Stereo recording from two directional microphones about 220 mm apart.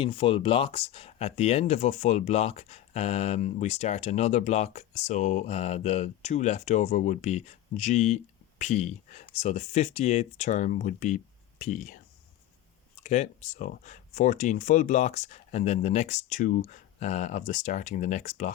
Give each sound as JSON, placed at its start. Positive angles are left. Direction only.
{"t": 0.0, "sound": "speech", "side_deg": 25}
{"t": 13.0, "sound": "speech", "side_deg": 35}